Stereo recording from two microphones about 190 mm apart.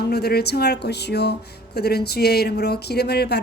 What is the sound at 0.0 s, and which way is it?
Speech, 55° left (ahead or behind).